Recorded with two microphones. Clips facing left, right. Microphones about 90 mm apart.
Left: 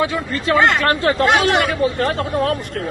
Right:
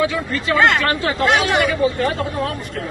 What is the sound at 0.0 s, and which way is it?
Speech, 35° left (ahead or behind).